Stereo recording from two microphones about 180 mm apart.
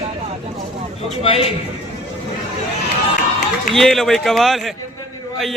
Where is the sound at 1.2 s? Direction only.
30° left (ahead or behind).